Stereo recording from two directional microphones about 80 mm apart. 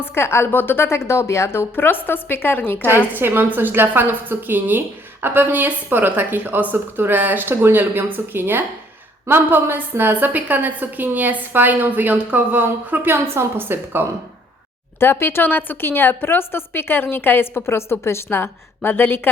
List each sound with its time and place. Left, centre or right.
0.0 s a woman's voice: left
3.1 s a woman's voice: right
13.2 s a woman's voice: right
14.9 s a woman's voice: left